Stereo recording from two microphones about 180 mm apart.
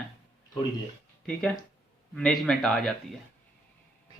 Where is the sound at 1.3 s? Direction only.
5° left (ahead or behind).